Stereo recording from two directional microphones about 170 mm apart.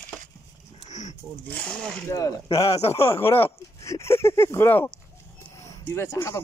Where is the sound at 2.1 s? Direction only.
20° left (ahead or behind).